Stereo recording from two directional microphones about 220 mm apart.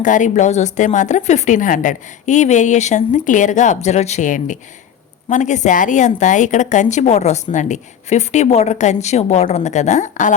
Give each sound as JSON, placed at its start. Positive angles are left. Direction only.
{"t": 0.0, "sound": "a woman's voice", "side_deg": 35}